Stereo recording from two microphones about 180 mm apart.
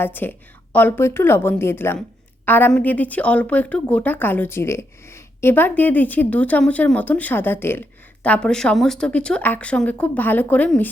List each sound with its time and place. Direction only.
0.0 s speech: 10° left (ahead or behind)